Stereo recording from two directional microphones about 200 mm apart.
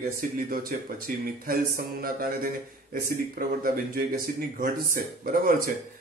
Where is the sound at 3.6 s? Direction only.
45° right (ahead or behind).